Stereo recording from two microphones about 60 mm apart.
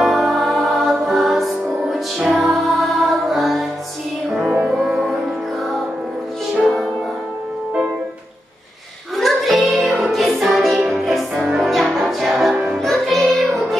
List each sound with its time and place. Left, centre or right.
0.0 s music: centre
4.7 s music: centre
6.5 s music: centre
9.1 s music: centre